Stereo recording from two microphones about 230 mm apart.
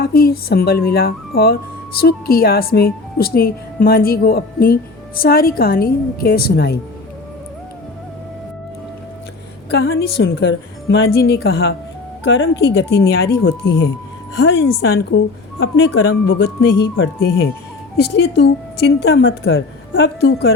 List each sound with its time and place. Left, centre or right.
0.0 s a woman's voice: left
9.6 s a woman's voice: left